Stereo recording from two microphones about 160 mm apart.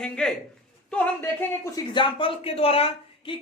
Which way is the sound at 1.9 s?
35° left (ahead or behind).